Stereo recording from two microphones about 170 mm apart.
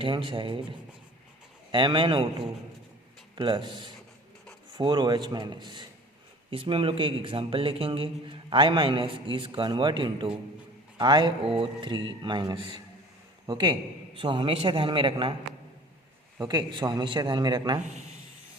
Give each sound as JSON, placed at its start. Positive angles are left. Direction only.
{"t": 0.0, "sound": "a man's voice", "side_deg": -30}
{"t": 1.7, "sound": "a man's voice", "side_deg": -30}
{"t": 3.3, "sound": "a man's voice", "side_deg": -30}
{"t": 16.4, "sound": "a man's voice", "side_deg": -25}